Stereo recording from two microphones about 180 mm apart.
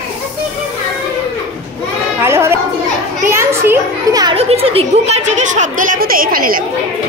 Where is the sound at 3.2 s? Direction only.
15° right (ahead or behind).